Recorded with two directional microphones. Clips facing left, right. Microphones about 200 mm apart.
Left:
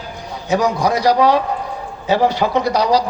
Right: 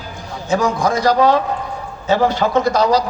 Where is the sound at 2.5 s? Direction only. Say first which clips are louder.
Right 1 dB; 50° right (ahead or behind).